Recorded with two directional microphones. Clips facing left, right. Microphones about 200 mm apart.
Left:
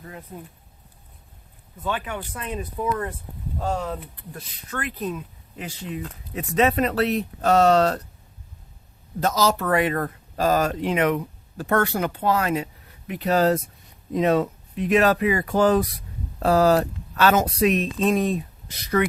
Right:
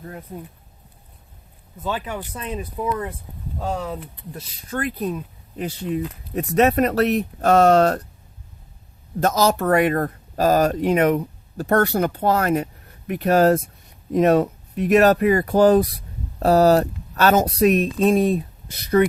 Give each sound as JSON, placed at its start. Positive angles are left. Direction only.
{"t": 2.3, "sound": "speech", "side_deg": -20}
{"t": 4.7, "sound": "speech", "side_deg": -35}
{"t": 6.3, "sound": "speech", "side_deg": -50}
{"t": 9.2, "sound": "speech", "side_deg": -50}
{"t": 18.9, "sound": "speech", "side_deg": -30}